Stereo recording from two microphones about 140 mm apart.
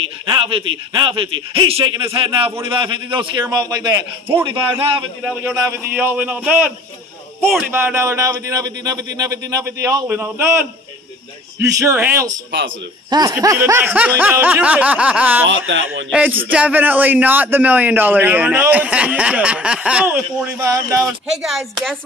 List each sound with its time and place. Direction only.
0.3 s a man's voice: 40° right (ahead or behind)
5.2 s a man's voice: 10° right (ahead or behind)
5.6 s speech: 20° right (ahead or behind)
5.9 s a man's voice: 10° right (ahead or behind)
7.7 s speech: 20° right (ahead or behind)
11.7 s a man's voice: 20° right (ahead or behind)
21.4 s speech: 5° right (ahead or behind)